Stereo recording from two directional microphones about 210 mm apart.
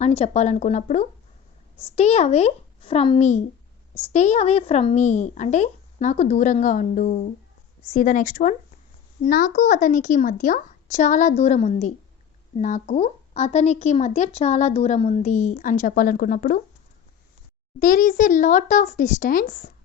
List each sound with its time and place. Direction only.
0.2 s a woman's voice: 35° left (ahead or behind)
17.7 s a woman's voice: 40° left (ahead or behind)